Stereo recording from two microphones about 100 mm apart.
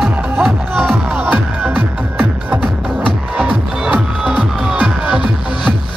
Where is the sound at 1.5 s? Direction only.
20° right (ahead or behind).